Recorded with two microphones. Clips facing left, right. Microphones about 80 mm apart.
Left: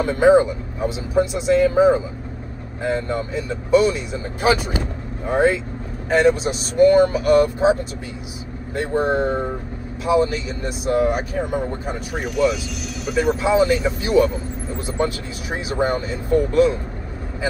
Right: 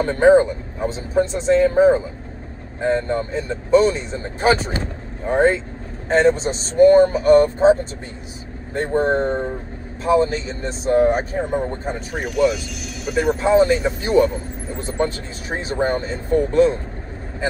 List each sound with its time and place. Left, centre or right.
0.0 s speech: right
8.9 s speech: centre
10.0 s speech: right
12.1 s speech: centre
13.4 s speech: right